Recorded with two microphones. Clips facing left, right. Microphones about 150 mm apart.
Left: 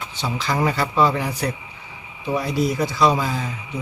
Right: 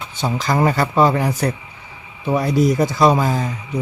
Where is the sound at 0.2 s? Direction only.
45° right (ahead or behind).